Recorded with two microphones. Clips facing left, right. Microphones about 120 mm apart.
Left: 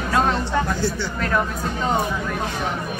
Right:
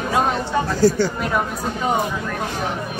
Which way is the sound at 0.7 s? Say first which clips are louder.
Right 8 dB; 40° right (ahead or behind).